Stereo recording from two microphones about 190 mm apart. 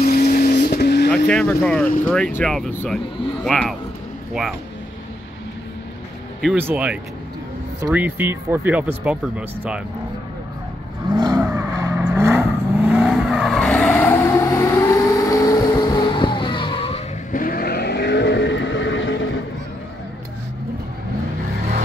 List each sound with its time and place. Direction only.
0.0 s vehicle: 50° left (ahead or behind)
1.1 s speech: 5° left (ahead or behind)
6.4 s speech: 10° right (ahead or behind)
11.1 s vehicle: 20° right (ahead or behind); by 17.0 s 30° left (ahead or behind)
17.3 s vehicle: 50° left (ahead or behind); by 19.3 s 90° left